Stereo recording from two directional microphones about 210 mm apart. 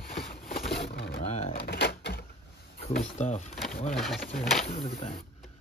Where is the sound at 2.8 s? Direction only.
35° left (ahead or behind).